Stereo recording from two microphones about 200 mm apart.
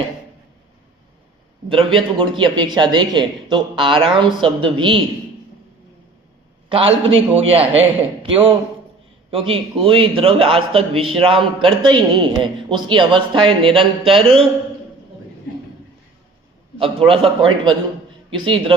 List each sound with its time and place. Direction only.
1.7 s a man's voice: 25° right (ahead or behind)
6.7 s a man's voice: 25° right (ahead or behind)
16.7 s a man's voice: 25° right (ahead or behind)